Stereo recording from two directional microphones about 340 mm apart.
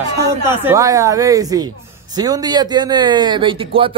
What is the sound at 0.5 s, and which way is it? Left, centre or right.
Speech, centre.